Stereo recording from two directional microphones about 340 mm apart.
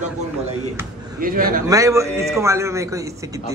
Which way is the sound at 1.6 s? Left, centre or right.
Centre.